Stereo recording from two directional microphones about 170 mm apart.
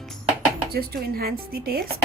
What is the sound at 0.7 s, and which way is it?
A woman's voice, 65° right (ahead or behind).